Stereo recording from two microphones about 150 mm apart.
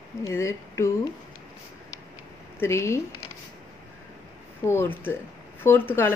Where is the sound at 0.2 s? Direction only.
20° left (ahead or behind).